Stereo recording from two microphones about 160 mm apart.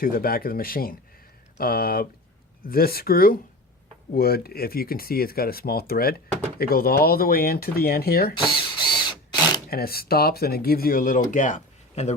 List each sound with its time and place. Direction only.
0.0 s speech: 65° left (ahead or behind)
8.4 s a sound: 30° left (ahead or behind)
9.6 s speech: 70° left (ahead or behind); by 12.1 s 50° left (ahead or behind)